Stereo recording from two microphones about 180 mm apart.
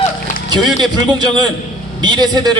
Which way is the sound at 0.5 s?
25° right (ahead or behind).